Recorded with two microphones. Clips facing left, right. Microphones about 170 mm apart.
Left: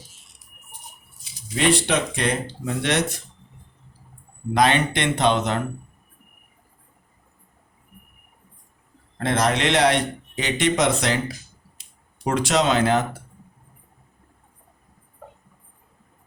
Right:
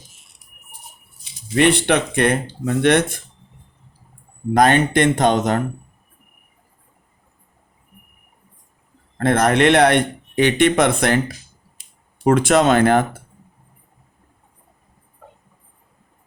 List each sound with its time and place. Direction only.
1.5 s a man's voice: 60° right (ahead or behind)
4.5 s speech: 45° right (ahead or behind)
9.1 s a man's voice: 55° right (ahead or behind)